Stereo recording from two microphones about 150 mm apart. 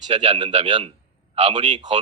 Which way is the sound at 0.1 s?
40° right (ahead or behind).